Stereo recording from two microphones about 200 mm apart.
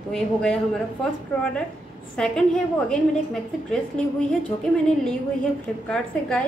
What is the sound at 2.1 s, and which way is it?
A woman's voice, 5° left (ahead or behind).